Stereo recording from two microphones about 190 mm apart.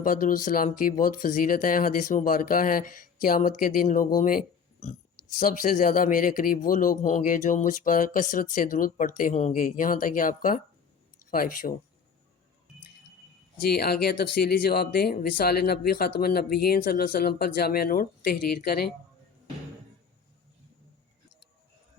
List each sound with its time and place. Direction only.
0.0 s speech: 45° left (ahead or behind)
13.6 s speech: 55° left (ahead or behind)